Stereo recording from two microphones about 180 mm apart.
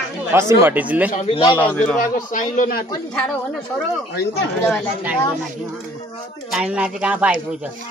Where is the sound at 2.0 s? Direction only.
45° left (ahead or behind).